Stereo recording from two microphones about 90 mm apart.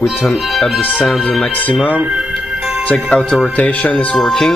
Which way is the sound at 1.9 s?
10° right (ahead or behind).